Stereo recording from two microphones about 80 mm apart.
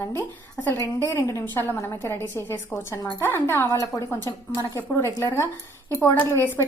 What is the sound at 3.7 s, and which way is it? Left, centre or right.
A woman's voice, left.